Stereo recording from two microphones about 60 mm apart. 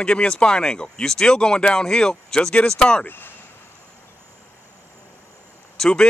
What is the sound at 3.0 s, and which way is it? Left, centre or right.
Speech, left.